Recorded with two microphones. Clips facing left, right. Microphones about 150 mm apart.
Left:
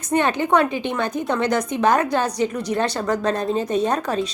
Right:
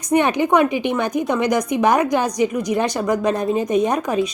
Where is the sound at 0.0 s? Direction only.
15° right (ahead or behind).